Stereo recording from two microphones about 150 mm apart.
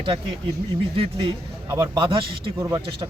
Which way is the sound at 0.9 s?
35° right (ahead or behind).